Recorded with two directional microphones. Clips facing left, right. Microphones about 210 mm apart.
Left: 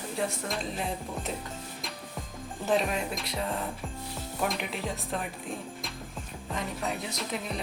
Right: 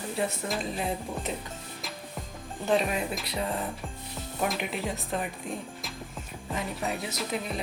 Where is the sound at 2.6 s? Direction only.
Centre (ahead or behind).